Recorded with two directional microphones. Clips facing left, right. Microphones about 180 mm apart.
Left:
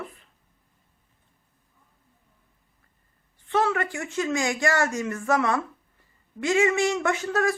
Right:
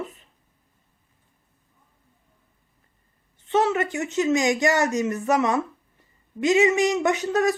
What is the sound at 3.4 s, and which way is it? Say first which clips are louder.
Speech: right 3 dB; 20° right (ahead or behind).